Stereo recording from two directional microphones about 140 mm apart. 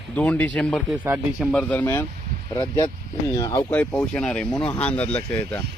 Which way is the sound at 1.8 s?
15° left (ahead or behind).